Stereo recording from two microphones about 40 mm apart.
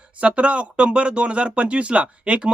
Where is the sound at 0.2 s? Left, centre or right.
Right.